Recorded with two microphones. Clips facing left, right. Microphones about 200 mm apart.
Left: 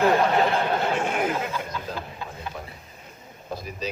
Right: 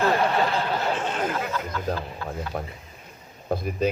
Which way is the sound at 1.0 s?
10° left (ahead or behind).